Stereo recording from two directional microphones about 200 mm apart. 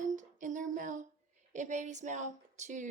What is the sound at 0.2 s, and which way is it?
Female singing, 40° right (ahead or behind).